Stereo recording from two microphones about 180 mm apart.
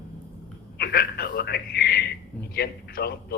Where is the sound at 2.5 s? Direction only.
60° left (ahead or behind).